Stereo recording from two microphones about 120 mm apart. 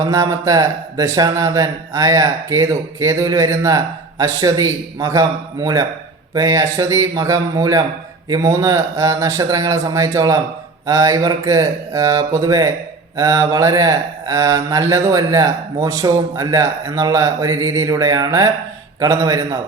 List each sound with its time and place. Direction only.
0.0 s a man's voice: 30° right (ahead or behind)